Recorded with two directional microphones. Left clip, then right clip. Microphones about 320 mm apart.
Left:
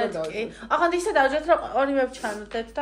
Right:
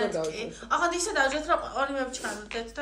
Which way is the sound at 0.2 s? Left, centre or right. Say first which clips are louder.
Left 3 dB; centre.